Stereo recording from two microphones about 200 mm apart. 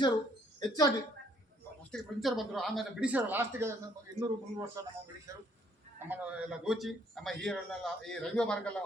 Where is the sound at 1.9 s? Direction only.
Centre (ahead or behind).